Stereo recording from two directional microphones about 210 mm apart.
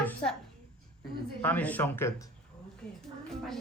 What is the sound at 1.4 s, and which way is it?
Speech, 10° left (ahead or behind).